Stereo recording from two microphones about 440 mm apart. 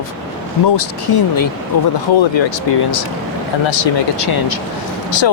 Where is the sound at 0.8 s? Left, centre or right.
Left.